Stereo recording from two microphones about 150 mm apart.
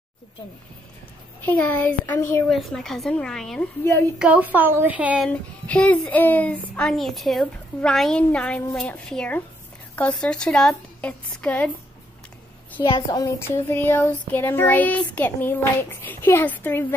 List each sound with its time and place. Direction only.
1.4 s speech: 15° left (ahead or behind)
2.5 s speech: centre (ahead or behind)
4.2 s a woman's voice: 10° right (ahead or behind)
5.3 s speech: 10° left (ahead or behind)
12.8 s a woman's voice: 30° left (ahead or behind)
13.5 s speech: 15° left (ahead or behind)